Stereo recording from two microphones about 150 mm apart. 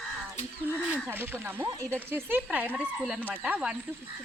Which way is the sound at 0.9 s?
15° right (ahead or behind).